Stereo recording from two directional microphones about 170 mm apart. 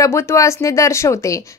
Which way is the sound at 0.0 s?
15° left (ahead or behind).